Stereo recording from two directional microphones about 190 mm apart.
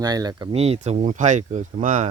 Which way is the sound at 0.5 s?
35° right (ahead or behind).